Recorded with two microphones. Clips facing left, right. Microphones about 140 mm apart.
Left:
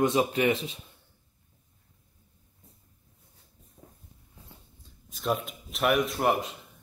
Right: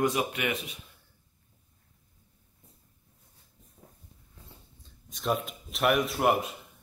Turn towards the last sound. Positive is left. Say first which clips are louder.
# even
turn(degrees=-5)  # may be behind; listen again after turning